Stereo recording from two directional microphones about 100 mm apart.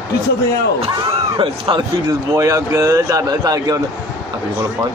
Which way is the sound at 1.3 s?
60° right (ahead or behind).